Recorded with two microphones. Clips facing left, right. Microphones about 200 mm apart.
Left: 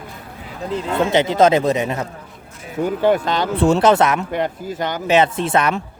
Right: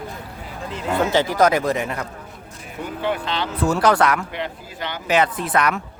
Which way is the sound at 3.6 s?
25° left (ahead or behind).